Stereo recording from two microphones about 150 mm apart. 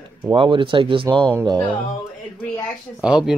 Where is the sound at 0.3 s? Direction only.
35° right (ahead or behind).